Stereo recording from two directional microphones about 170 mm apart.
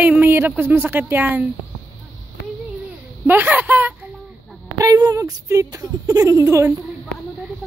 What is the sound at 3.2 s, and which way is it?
Speech, 10° right (ahead or behind).